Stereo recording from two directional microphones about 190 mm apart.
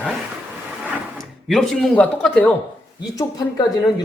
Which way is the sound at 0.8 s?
Centre (ahead or behind).